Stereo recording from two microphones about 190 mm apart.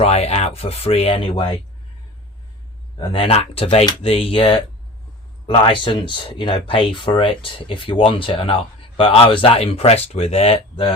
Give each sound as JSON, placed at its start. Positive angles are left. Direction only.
{"t": 0.0, "sound": "speech", "side_deg": 35}
{"t": 3.0, "sound": "speech", "side_deg": 30}